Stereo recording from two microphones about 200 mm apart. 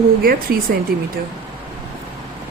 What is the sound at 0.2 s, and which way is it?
Speech, 45° right (ahead or behind).